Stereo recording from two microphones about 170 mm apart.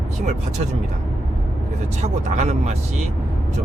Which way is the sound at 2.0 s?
40° right (ahead or behind).